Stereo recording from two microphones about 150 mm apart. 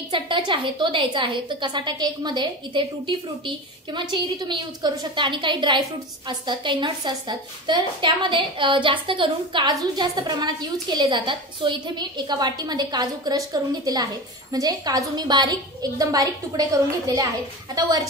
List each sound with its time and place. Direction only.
0.1 s a woman's voice: 35° right (ahead or behind)
17.7 s a woman's voice: 25° right (ahead or behind)